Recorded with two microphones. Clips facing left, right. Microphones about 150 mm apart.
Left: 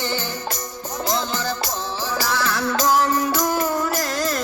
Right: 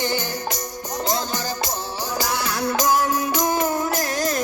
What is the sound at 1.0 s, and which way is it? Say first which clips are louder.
Music: left 2 dB; 15° right (ahead or behind).